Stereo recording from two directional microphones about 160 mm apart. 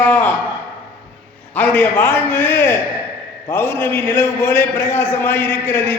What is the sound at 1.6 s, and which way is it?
A man's voice, 10° left (ahead or behind).